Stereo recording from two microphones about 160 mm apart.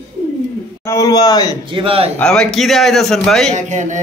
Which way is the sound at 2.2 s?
5° left (ahead or behind).